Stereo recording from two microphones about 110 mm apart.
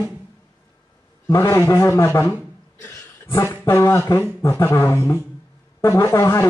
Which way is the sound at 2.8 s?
25° left (ahead or behind).